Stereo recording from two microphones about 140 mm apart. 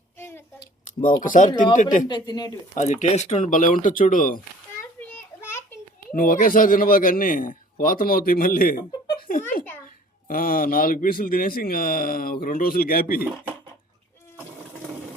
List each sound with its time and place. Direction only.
0.2 s a sound: 15° left (ahead or behind)
1.2 s speech: 70° left (ahead or behind)
1.5 s speech: 30° left (ahead or behind)
1.7 s speech: 65° left (ahead or behind)
2.0 s speech: 30° left (ahead or behind)
2.7 s speech: 60° left (ahead or behind)
4.9 s children playing: 15° left (ahead or behind)
6.1 s a man's voice: 80° left